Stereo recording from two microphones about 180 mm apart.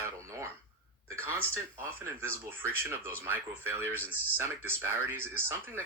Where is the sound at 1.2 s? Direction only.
10° left (ahead or behind).